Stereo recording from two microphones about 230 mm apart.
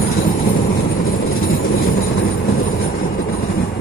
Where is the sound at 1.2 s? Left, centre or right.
Left.